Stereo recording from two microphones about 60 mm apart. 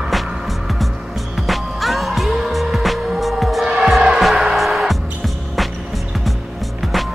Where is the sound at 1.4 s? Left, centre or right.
Centre.